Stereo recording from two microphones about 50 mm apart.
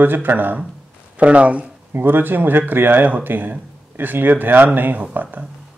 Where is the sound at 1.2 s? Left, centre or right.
Right.